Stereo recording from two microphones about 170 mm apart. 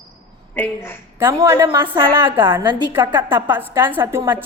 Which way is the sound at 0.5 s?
15° left (ahead or behind).